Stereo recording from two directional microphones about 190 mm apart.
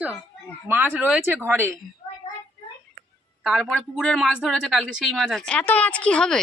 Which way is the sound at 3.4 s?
Centre (ahead or behind).